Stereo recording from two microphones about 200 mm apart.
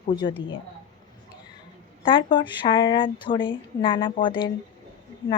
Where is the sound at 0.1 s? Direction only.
20° left (ahead or behind).